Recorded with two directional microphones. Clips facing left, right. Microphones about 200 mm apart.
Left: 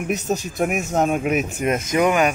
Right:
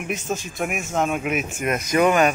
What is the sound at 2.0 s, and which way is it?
Speech, 15° left (ahead or behind).